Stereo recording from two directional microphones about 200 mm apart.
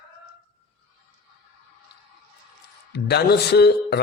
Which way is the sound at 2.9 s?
55° left (ahead or behind).